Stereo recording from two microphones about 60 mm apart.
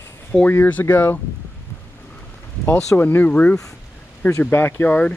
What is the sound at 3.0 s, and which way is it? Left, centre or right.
Speech, left.